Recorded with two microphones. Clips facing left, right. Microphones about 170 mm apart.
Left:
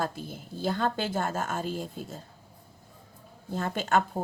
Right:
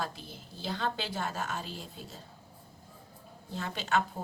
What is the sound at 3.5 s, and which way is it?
Speech, 50° left (ahead or behind).